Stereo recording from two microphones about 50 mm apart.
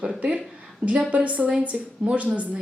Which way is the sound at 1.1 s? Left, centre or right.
Right.